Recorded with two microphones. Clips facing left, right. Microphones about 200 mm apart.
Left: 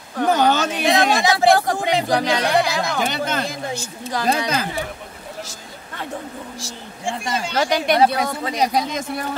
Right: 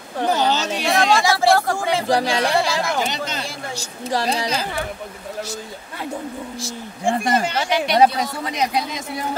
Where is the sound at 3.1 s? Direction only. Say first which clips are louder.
Left 4 dB; 55° left (ahead or behind).